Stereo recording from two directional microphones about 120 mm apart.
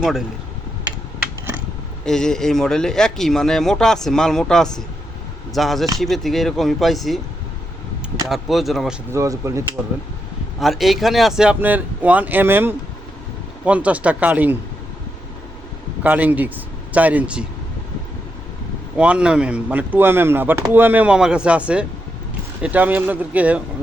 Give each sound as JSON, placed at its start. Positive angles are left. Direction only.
{"t": 2.0, "sound": "speech", "side_deg": 5}
{"t": 8.3, "sound": "speech", "side_deg": 0}
{"t": 9.1, "sound": "speech", "side_deg": -25}
{"t": 10.6, "sound": "speech", "side_deg": 0}
{"t": 11.6, "sound": "speech", "side_deg": -15}
{"t": 16.0, "sound": "speech", "side_deg": -15}
{"t": 18.9, "sound": "speech", "side_deg": -10}